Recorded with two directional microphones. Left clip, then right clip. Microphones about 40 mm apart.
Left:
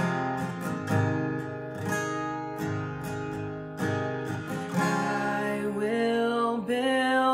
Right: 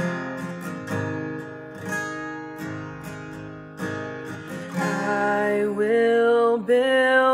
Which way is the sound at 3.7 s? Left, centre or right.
Left.